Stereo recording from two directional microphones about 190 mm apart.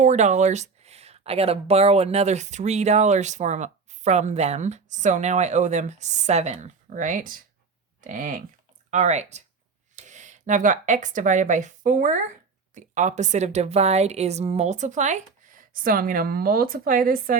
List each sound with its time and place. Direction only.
0.0 s speech: 40° right (ahead or behind)